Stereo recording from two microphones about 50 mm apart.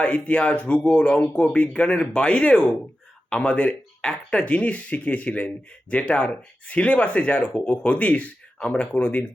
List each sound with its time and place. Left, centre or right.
0.0 s speech: left